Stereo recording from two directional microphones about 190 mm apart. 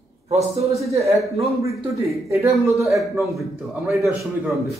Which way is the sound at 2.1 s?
15° right (ahead or behind).